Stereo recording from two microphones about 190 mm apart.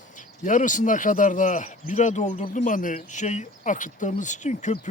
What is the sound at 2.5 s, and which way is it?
Speech, 45° left (ahead or behind).